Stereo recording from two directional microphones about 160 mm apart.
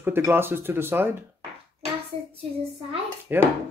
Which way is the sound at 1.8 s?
40° right (ahead or behind).